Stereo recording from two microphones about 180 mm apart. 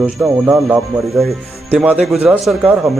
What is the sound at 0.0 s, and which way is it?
Speech, 5° right (ahead or behind).